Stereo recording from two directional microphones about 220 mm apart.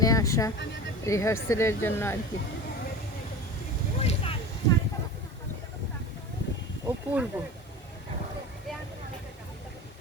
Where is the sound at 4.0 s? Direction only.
30° left (ahead or behind).